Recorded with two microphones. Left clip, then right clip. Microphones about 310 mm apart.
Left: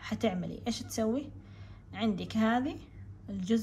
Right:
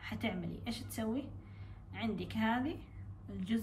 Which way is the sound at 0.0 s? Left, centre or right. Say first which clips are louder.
Left 7 dB; centre.